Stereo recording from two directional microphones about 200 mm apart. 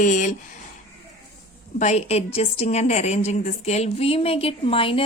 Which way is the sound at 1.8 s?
30° left (ahead or behind).